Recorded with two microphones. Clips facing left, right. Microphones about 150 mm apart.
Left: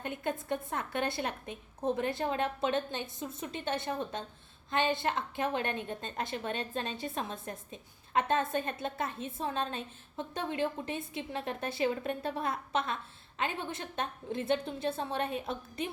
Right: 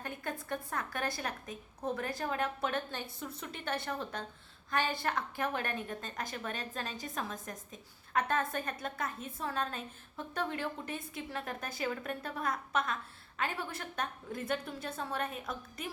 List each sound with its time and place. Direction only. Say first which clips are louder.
0.0 s a woman's voice: left 5 dB; 20° left (ahead or behind)